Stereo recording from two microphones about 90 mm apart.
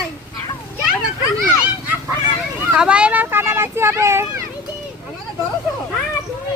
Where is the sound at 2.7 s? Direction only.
10° right (ahead or behind); by 4.4 s 30° right (ahead or behind).